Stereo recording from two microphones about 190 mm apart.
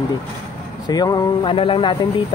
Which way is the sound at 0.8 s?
20° left (ahead or behind).